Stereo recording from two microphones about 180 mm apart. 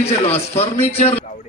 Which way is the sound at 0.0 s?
35° left (ahead or behind).